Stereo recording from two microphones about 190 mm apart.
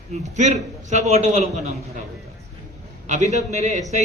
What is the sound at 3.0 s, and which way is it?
Speech, 40° right (ahead or behind).